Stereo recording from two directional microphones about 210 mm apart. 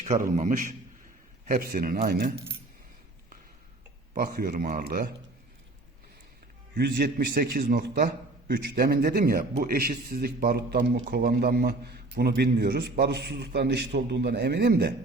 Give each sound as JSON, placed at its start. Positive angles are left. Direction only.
{"t": 0.0, "sound": "a man's voice", "side_deg": -40}
{"t": 4.1, "sound": "a man's voice", "side_deg": -40}
{"t": 6.7, "sound": "a man's voice", "side_deg": -50}